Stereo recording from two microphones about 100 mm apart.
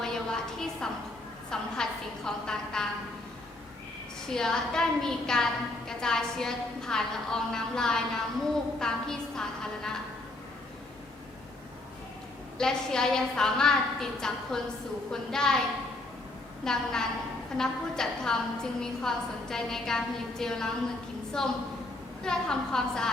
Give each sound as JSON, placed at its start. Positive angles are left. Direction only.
{"t": 0.0, "sound": "a sound", "side_deg": 5}
{"t": 1.5, "sound": "a woman's voice", "side_deg": 5}
{"t": 4.3, "sound": "a woman's voice", "side_deg": 5}
{"t": 12.5, "sound": "a woman's voice", "side_deg": 5}
{"t": 16.6, "sound": "a woman's voice", "side_deg": 5}